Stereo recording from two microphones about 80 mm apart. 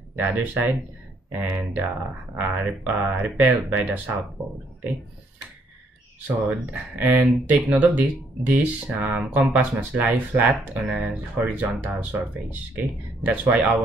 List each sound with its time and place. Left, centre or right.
0.2 s speech: centre
6.2 s speech: centre